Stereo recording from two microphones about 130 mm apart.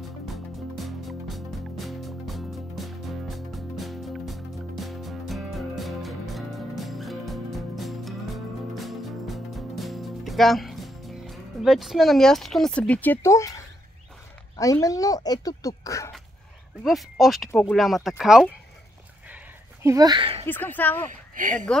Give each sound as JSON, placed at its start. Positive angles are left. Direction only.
{"t": 0.7, "sound": "music", "side_deg": 0}
{"t": 14.6, "sound": "speech", "side_deg": 25}
{"t": 16.8, "sound": "speech", "side_deg": 0}
{"t": 19.2, "sound": "a sound", "side_deg": -15}
{"t": 20.2, "sound": "speech", "side_deg": -45}
{"t": 20.4, "sound": "speech", "side_deg": 15}
{"t": 21.1, "sound": "speech", "side_deg": -80}